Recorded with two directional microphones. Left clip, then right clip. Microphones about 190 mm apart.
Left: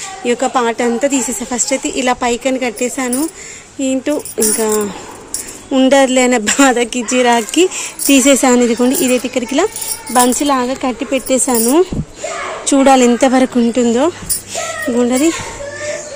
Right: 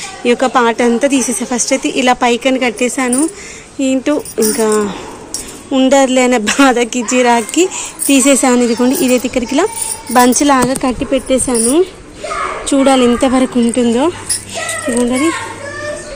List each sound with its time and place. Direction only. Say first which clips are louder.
0.3 s speech: right 3 dB; 10° left (ahead or behind)
5.7 s speech: even; 25° left (ahead or behind)
10.1 s speech: right 3 dB; 5° left (ahead or behind)
11.4 s a woman's voice: even; 30° left (ahead or behind)
15.1 s a woman's voice: even; 35° left (ahead or behind)